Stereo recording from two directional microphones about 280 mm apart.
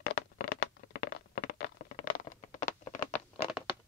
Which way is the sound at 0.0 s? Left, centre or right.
Left.